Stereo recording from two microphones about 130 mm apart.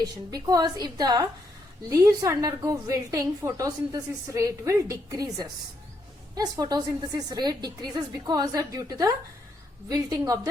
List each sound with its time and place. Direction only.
0.0 s a woman's voice: 30° right (ahead or behind)